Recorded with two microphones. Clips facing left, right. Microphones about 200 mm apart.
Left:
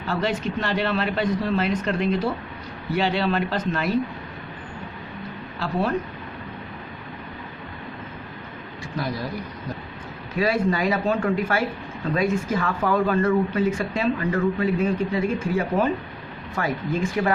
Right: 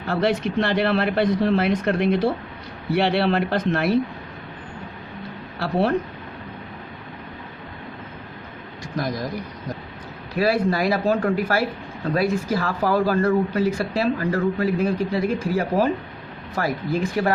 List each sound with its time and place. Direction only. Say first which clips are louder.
0.0 s speech: right 3 dB; 55° right (ahead or behind)
5.5 s speech: right 3 dB; 65° right (ahead or behind)
9.0 s speech: right 2 dB; 40° right (ahead or behind)
10.3 s speech: right 2 dB; 35° right (ahead or behind)